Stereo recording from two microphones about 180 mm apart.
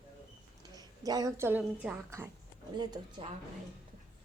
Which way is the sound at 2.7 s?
25° right (ahead or behind).